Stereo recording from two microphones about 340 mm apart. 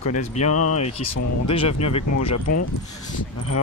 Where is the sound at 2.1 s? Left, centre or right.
Left.